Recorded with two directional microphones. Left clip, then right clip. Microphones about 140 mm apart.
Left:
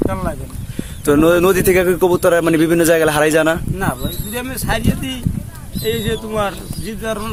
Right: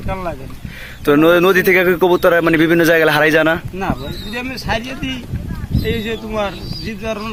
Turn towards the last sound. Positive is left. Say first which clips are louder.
# even
turn(degrees=25)  # may be behind; listen again after turning